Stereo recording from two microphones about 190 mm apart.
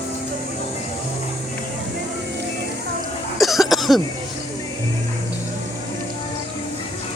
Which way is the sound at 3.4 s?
Centre (ahead or behind).